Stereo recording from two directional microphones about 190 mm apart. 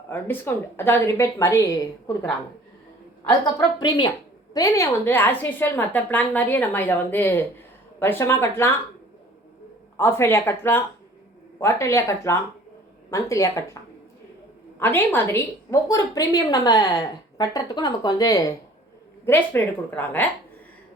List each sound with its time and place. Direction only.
0.1 s a woman's voice: 10° left (ahead or behind)
3.4 s a woman's voice: 20° left (ahead or behind)
10.0 s a woman's voice: 10° left (ahead or behind)
14.8 s a woman's voice: 10° left (ahead or behind)